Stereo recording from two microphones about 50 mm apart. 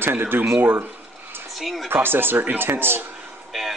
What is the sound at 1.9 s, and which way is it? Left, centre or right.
Speech, right.